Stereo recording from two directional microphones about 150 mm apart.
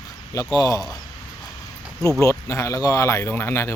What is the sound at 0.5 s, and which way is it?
Speech, 25° left (ahead or behind).